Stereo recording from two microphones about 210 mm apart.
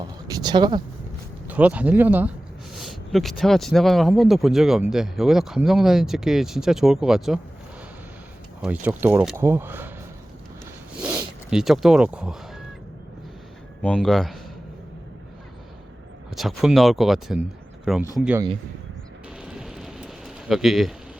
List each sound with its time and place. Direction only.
0.0 s speech: 20° right (ahead or behind)
1.5 s speech: 5° right (ahead or behind)
8.6 s speech: 10° right (ahead or behind)
11.0 s zipper: 5° right (ahead or behind)
13.8 s speech: 5° left (ahead or behind)
16.3 s speech: centre (ahead or behind)
19.4 s bird: 5° right (ahead or behind)